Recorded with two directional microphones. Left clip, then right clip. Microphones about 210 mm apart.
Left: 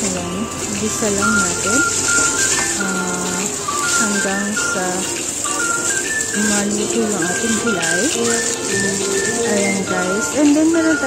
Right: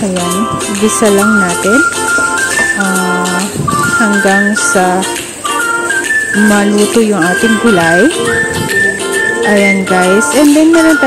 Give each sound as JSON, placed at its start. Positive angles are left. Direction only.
{"t": 4.0, "sound": "music", "side_deg": -35}
{"t": 7.2, "sound": "music", "side_deg": -30}
{"t": 9.9, "sound": "music", "side_deg": -40}